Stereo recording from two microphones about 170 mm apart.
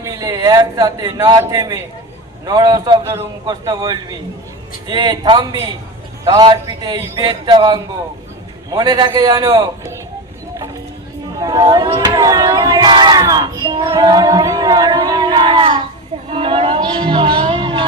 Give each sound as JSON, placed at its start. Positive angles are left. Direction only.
{"t": 0.0, "sound": "child singing", "side_deg": -20}
{"t": 11.3, "sound": "child singing", "side_deg": -20}
{"t": 16.3, "sound": "speech", "side_deg": -30}